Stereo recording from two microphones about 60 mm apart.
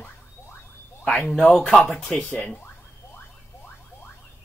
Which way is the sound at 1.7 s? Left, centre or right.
Centre.